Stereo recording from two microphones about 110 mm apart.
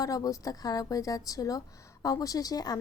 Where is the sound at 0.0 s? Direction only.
30° left (ahead or behind).